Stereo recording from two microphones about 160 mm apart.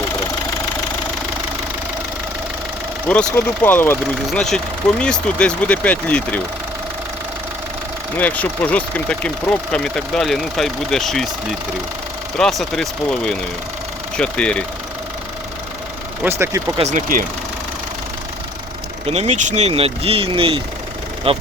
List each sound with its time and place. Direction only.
3.3 s speech: 10° left (ahead or behind)
8.2 s speech: 10° left (ahead or behind)
12.4 s speech: centre (ahead or behind)
16.2 s speech: 15° right (ahead or behind)
16.7 s speech: 45° right (ahead or behind)
19.0 s speech: 40° right (ahead or behind)